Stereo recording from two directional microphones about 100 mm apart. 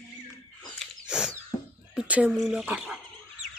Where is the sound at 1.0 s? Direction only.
10° right (ahead or behind).